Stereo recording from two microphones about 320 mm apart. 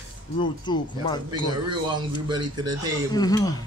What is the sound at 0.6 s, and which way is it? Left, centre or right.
Speech, centre.